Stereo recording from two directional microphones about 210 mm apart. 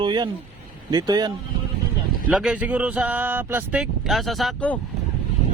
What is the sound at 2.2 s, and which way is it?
Speech, 5° right (ahead or behind).